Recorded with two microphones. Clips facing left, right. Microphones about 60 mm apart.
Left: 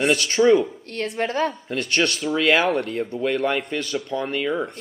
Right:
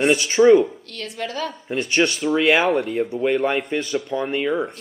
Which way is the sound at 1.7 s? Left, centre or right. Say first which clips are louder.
Right 2 dB; centre.